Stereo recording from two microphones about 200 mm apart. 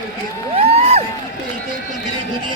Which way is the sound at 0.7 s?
30° right (ahead or behind).